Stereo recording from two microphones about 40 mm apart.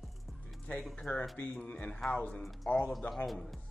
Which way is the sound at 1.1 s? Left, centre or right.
Left.